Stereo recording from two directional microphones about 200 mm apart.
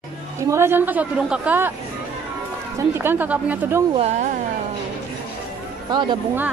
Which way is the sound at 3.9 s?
35° right (ahead or behind).